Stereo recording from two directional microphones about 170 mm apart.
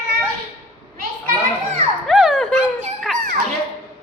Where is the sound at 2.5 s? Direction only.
40° right (ahead or behind).